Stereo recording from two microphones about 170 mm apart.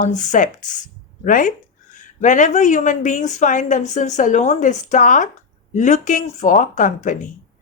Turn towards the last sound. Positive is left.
turn(degrees=50)  # may be behind; listen again after turning